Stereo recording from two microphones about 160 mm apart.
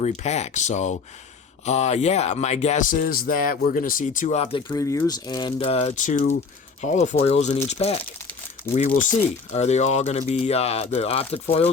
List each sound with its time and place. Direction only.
0.0 s speech: 45° left (ahead or behind)
4.5 s speech: 25° left (ahead or behind); by 8.0 s 40° left (ahead or behind)
8.9 s speech: 55° left (ahead or behind); by 11.7 s 40° left (ahead or behind)